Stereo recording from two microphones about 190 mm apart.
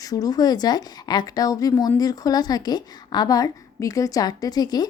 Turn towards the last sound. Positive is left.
turn(degrees=20)  # may be behind; listen again after turning